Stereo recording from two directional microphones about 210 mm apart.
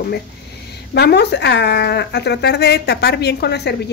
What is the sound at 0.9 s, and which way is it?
Speech, 50° left (ahead or behind).